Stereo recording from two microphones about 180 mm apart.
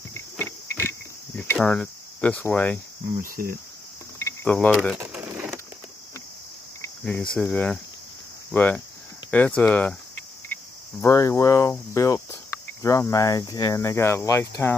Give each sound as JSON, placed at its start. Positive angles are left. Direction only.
{"t": 0.1, "sound": "cricket", "side_deg": 15}
{"t": 3.2, "sound": "cricket", "side_deg": -50}
{"t": 4.2, "sound": "cricket", "side_deg": 10}
{"t": 4.9, "sound": "a sound", "side_deg": -10}
{"t": 7.3, "sound": "cricket", "side_deg": 5}
{"t": 8.5, "sound": "speech", "side_deg": 10}
{"t": 10.5, "sound": "cricket", "side_deg": 15}